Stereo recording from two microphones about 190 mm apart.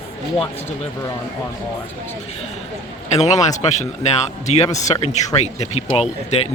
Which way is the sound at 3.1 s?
35° left (ahead or behind).